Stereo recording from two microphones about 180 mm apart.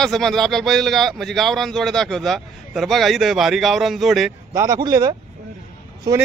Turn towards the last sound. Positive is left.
turn(degrees=-25)  # may be behind; listen again after turning